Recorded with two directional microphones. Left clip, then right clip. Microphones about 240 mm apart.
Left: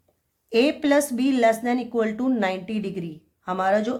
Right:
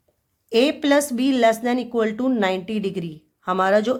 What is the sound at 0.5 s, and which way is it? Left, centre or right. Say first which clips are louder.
A woman's voice: right 2 dB; right.